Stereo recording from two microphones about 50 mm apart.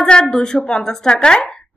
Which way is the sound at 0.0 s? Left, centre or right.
Centre.